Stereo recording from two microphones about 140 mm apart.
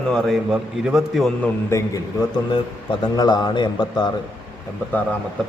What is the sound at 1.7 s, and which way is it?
A man's voice, 25° left (ahead or behind).